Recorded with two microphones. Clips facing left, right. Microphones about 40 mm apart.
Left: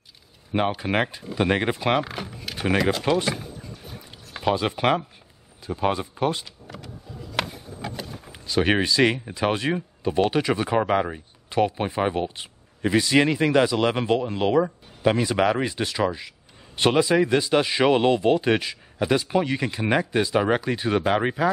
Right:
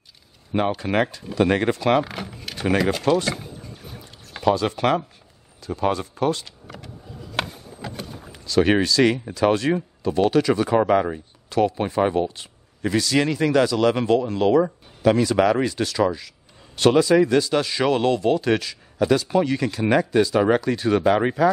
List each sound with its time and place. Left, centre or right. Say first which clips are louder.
0.5 s speech: right 1 dB; centre
2.0 s a sound: right 3 dB; centre
2.6 s speech: right 2 dB; centre
4.4 s a man's voice: right 3 dB; centre
8.3 s a man's voice: right 3 dB; left
11.4 s a man's voice: right 2 dB; left